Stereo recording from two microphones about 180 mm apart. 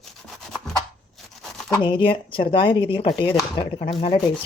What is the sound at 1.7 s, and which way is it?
Speech, 25° left (ahead or behind).